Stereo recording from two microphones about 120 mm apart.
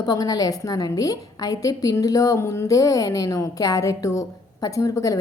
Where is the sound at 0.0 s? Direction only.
30° left (ahead or behind).